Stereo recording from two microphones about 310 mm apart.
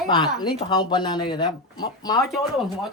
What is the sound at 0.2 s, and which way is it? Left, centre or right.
Speech, centre.